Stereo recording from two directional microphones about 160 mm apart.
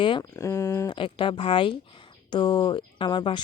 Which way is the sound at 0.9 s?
30° left (ahead or behind).